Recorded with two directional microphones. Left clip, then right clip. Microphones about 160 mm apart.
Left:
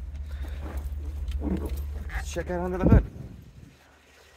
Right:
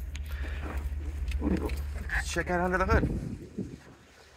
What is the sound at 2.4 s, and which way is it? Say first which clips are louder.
Speech: right 1 dB; 25° right (ahead or behind).